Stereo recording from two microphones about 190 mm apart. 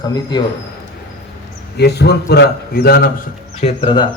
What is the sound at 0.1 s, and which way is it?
Speech, 20° left (ahead or behind).